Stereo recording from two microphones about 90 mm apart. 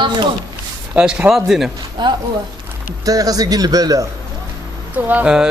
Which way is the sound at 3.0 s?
40° right (ahead or behind).